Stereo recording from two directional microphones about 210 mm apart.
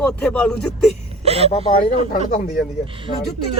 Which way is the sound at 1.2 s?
30° right (ahead or behind).